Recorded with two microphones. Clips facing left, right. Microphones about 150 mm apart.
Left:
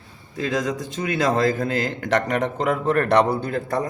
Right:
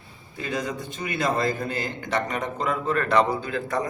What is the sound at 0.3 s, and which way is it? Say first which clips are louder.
A man's voice: left 5 dB; 90° left.